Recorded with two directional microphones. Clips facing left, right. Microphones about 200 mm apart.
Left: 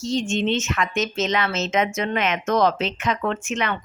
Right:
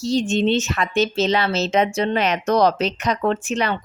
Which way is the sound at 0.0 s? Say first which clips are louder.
Right 4 dB; 35° right (ahead or behind).